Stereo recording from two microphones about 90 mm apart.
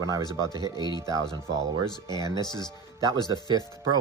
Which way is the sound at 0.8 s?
50° left (ahead or behind).